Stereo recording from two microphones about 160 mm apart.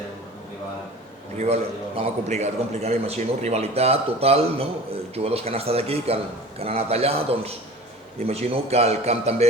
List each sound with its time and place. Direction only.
2.0 s a man's voice: 45° right (ahead or behind)